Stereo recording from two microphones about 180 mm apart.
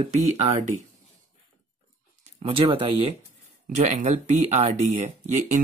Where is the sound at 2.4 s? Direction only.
30° right (ahead or behind).